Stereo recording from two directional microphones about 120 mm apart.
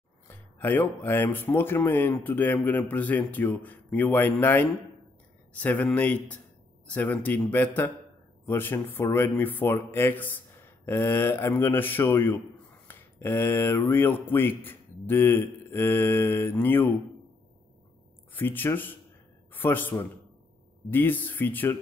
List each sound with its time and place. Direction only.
0.3 s speech: 15° left (ahead or behind)
18.3 s a man's voice: 15° left (ahead or behind)